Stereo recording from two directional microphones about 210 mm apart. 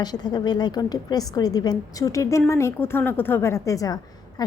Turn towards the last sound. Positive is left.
turn(degrees=20)  # may be behind; listen again after turning